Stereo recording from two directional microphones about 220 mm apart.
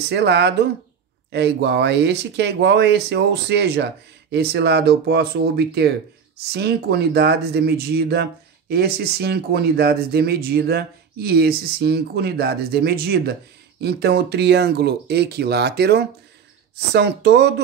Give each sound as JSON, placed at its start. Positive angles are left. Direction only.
{"t": 0.1, "sound": "speech", "side_deg": -50}